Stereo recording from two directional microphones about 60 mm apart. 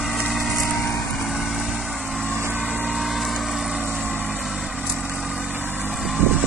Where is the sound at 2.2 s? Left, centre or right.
Right.